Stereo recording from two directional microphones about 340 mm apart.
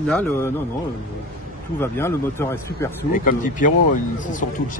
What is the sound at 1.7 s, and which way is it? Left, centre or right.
A man's voice, centre.